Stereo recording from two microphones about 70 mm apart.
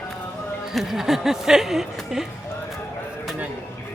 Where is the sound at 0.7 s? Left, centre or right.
Centre.